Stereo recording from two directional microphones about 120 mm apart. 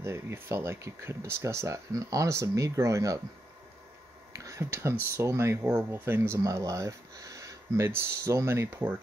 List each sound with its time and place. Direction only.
0.0 s speech: 20° right (ahead or behind)
4.5 s speech: 25° right (ahead or behind)